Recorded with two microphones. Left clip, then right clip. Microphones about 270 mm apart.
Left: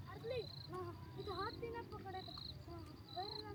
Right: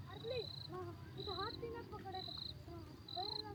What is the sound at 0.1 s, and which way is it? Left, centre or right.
Owl, centre.